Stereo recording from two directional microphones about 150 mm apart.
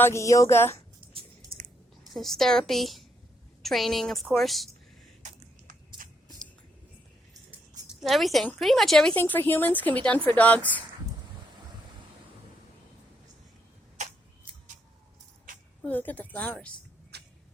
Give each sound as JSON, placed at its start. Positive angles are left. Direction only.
{"t": 0.0, "sound": "a woman's voice", "side_deg": 20}
{"t": 1.0, "sound": "squish", "side_deg": -10}
{"t": 2.1, "sound": "a woman's voice", "side_deg": 0}
{"t": 6.0, "sound": "a sound", "side_deg": -65}
{"t": 7.9, "sound": "a woman's voice", "side_deg": 0}
{"t": 14.0, "sound": "tick-tock", "side_deg": -50}
{"t": 15.8, "sound": "a woman's voice", "side_deg": 10}
{"t": 17.1, "sound": "a sound", "side_deg": -90}